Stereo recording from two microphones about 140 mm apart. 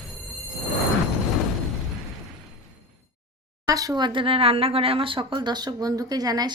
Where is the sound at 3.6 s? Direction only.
25° right (ahead or behind).